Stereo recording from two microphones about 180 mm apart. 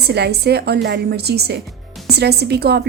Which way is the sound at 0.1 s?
65° right (ahead or behind).